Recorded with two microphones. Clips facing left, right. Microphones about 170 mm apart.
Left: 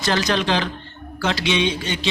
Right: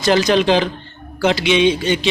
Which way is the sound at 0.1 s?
15° right (ahead or behind).